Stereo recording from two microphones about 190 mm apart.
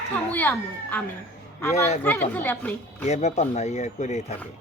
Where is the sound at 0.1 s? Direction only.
10° left (ahead or behind).